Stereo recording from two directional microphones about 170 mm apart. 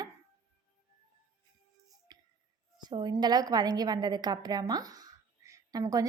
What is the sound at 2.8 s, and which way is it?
A woman's voice, 25° right (ahead or behind).